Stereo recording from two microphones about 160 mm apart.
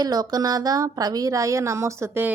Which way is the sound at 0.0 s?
25° right (ahead or behind).